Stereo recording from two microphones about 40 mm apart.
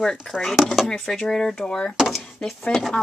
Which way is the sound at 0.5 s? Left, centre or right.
Centre.